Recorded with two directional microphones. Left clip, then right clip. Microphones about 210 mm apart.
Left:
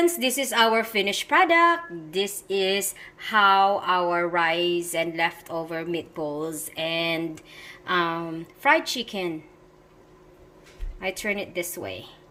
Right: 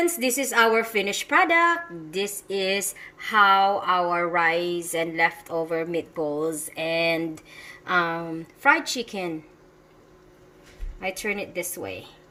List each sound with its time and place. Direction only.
0.0 s a woman's voice: centre (ahead or behind)
11.0 s a woman's voice: 5° left (ahead or behind)